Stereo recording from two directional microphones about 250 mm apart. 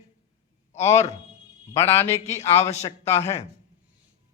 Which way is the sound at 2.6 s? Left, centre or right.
Centre.